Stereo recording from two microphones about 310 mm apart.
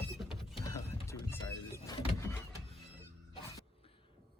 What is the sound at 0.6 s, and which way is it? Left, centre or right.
Power windows, centre.